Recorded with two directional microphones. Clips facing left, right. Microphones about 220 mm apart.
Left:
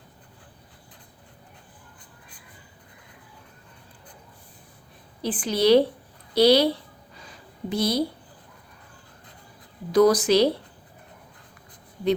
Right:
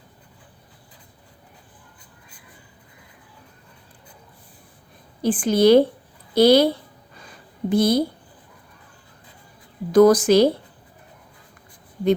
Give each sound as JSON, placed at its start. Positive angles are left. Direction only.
{"t": 5.2, "sound": "a woman's voice", "side_deg": -50}
{"t": 7.2, "sound": "a sound", "side_deg": -50}
{"t": 9.9, "sound": "a woman's voice", "side_deg": -50}